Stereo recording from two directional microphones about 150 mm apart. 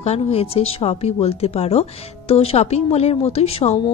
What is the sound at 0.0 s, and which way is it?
A woman's voice, 45° left (ahead or behind).